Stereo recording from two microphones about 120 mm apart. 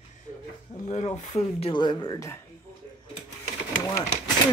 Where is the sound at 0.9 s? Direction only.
85° left.